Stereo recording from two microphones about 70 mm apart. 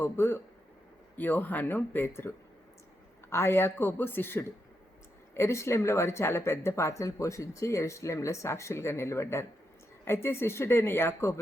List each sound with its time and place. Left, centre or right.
0.0 s speech: left